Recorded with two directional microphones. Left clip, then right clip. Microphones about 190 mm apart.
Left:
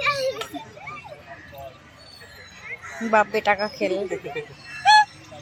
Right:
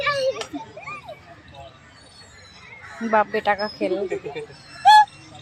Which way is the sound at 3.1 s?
Centre (ahead or behind).